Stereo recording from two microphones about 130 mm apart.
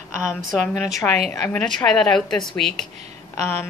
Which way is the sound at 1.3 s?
15° left (ahead or behind).